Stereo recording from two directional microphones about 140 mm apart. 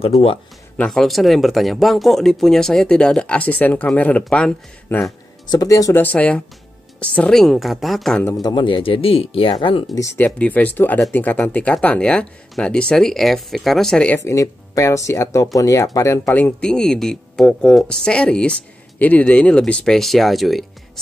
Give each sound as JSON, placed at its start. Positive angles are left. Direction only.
{"t": 0.1, "sound": "speech", "side_deg": 0}
{"t": 4.8, "sound": "speech", "side_deg": 15}
{"t": 6.0, "sound": "speech", "side_deg": 10}
{"t": 8.2, "sound": "speech", "side_deg": 25}
{"t": 9.9, "sound": "speech", "side_deg": 20}
{"t": 10.2, "sound": "speech", "side_deg": 10}
{"t": 14.1, "sound": "speech", "side_deg": 20}